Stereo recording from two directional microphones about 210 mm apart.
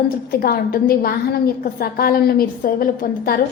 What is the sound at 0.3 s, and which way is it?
A woman's voice, 45° left (ahead or behind).